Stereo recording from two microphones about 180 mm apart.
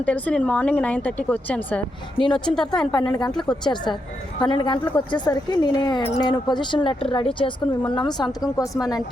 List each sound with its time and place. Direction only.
0.0 s speech: 5° left (ahead or behind)
2.1 s speech: 25° left (ahead or behind)
2.4 s speech: 5° left (ahead or behind)
3.5 s speech: 25° left (ahead or behind)